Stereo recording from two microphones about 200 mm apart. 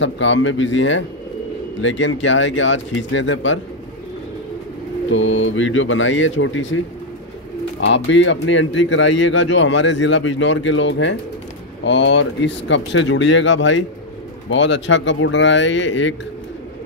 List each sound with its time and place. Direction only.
0.0 s speech: 70° left (ahead or behind)
5.1 s speech: 75° left (ahead or behind)
7.8 s speech: 65° left (ahead or behind)